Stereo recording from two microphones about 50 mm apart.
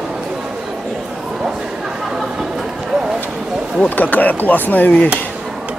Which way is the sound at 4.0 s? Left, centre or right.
Left.